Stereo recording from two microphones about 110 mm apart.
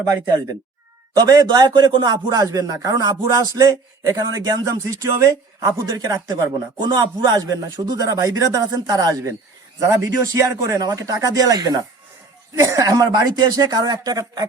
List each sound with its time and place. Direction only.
1.3 s speech: 35° right (ahead or behind)